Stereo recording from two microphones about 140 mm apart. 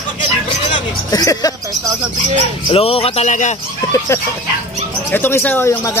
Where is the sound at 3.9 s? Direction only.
20° left (ahead or behind).